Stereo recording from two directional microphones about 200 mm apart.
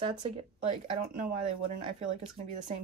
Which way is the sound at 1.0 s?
45° right (ahead or behind).